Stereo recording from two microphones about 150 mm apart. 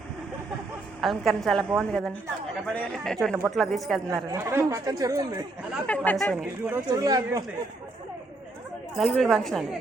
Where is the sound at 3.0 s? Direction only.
5° left (ahead or behind).